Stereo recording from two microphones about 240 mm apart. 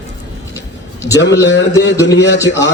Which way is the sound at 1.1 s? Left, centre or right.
Left.